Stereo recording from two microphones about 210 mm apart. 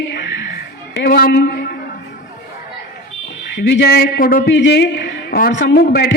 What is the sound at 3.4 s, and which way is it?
A man's voice, 55° left (ahead or behind).